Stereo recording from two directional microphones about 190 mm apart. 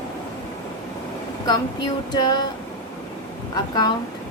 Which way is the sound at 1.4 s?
20° left (ahead or behind).